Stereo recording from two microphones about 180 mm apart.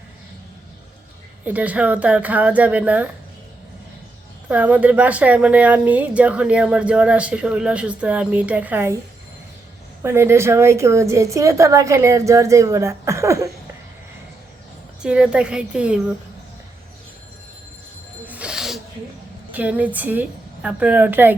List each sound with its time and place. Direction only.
1.5 s speech: 10° right (ahead or behind)
4.4 s speech: 10° right (ahead or behind)
10.0 s speech: 15° right (ahead or behind)
15.0 s a woman's voice: 5° right (ahead or behind)
18.3 s music: 5° right (ahead or behind)
19.5 s a woman's voice: 10° right (ahead or behind)